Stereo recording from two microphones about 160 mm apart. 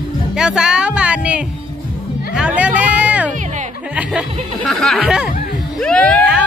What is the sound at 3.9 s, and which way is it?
Speech, 5° right (ahead or behind).